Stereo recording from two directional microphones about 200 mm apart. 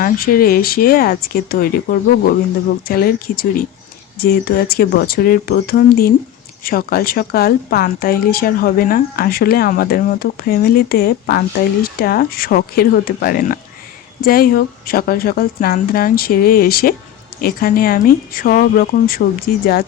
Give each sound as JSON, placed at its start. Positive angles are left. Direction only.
{"t": 0.0, "sound": "speech", "side_deg": 45}